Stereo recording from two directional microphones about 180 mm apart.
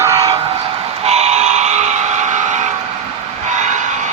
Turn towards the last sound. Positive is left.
turn(degrees=-40)  # may be behind; listen again after turning